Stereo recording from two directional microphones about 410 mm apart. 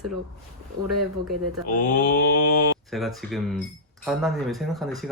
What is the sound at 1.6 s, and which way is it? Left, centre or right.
Mantra, left.